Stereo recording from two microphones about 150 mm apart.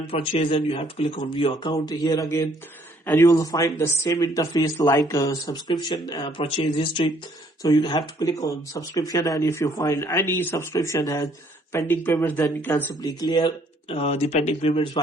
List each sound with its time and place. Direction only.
0.1 s speech: 40° left (ahead or behind); by 12.8 s 15° left (ahead or behind)
12.9 s speech: 25° left (ahead or behind); by 15.0 s 40° left (ahead or behind)